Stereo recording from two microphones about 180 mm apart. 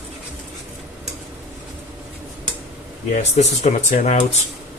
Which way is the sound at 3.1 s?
45° left (ahead or behind).